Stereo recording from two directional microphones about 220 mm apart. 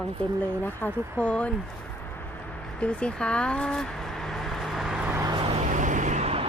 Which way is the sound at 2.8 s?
5° left (ahead or behind).